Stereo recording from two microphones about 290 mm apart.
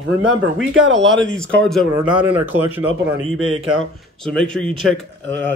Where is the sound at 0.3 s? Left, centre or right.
Right.